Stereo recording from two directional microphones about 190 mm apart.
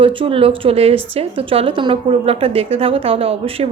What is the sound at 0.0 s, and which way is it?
A woman's voice, 25° right (ahead or behind).